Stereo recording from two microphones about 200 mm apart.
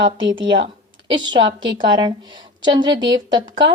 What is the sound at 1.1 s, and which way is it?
Speech, 25° right (ahead or behind).